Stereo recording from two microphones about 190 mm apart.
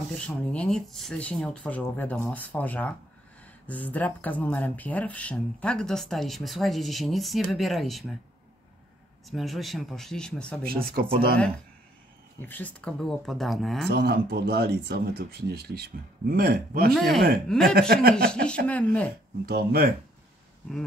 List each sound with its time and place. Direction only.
0.3 s speech: 5° left (ahead or behind)
9.3 s speech: centre (ahead or behind)
10.7 s speech: 50° right (ahead or behind)
12.4 s speech: 10° left (ahead or behind)
13.8 s speech: 55° right (ahead or behind)
16.9 s speech: centre (ahead or behind)
17.7 s speech: 55° right (ahead or behind)
18.7 s speech: 5° left (ahead or behind)
19.4 s speech: 55° right (ahead or behind)